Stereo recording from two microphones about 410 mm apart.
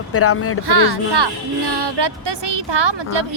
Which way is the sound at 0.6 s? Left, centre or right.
Right.